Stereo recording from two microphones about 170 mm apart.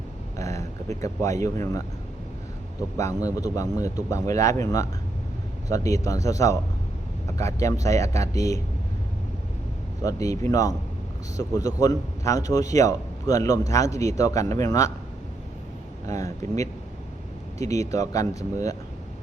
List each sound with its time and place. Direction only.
0.3 s speech: 20° left (ahead or behind)
3.0 s a man's voice: 20° left (ahead or behind)
10.0 s a man's voice: 20° left (ahead or behind)
16.0 s a man's voice: 20° left (ahead or behind)